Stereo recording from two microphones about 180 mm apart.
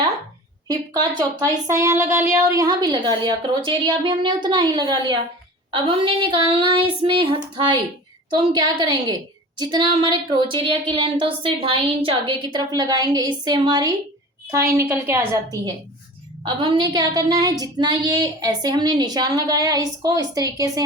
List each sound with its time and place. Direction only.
0.7 s a woman's voice: 20° right (ahead or behind)
16.6 s speech: 25° right (ahead or behind)